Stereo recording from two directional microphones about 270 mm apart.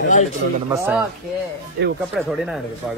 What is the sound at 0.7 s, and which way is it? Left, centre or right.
Speech, centre.